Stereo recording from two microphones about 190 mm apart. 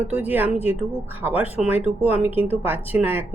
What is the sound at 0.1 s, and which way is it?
A woman's voice, 10° right (ahead or behind).